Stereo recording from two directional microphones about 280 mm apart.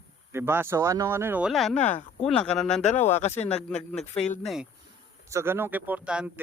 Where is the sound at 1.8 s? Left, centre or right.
Left.